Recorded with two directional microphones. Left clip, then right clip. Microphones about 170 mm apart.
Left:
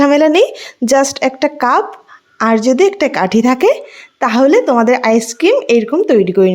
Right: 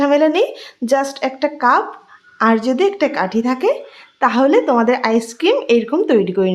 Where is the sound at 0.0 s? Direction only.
40° left (ahead or behind).